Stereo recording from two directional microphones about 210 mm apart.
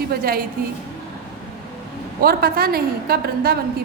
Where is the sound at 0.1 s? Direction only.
45° right (ahead or behind).